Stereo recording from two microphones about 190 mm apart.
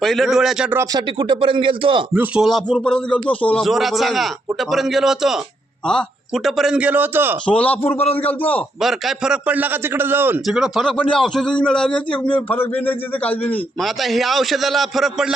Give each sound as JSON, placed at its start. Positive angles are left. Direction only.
{"t": 0.0, "sound": "a man's voice", "side_deg": 0}
{"t": 0.9, "sound": "speech", "side_deg": -25}
{"t": 2.1, "sound": "a man's voice", "side_deg": -5}
{"t": 7.4, "sound": "a man's voice", "side_deg": 5}